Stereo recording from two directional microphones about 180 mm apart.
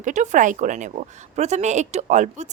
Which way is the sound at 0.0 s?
40° right (ahead or behind).